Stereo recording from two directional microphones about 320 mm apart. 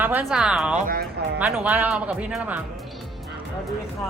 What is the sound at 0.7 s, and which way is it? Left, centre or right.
Speech, right.